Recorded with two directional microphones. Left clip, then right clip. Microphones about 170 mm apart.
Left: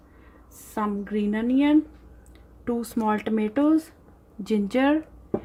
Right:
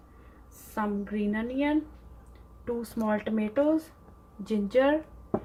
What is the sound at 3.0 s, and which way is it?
A woman's voice, 55° left (ahead or behind).